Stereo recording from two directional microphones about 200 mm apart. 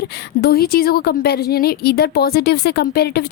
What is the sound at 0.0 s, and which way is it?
A woman's voice, 50° left (ahead or behind).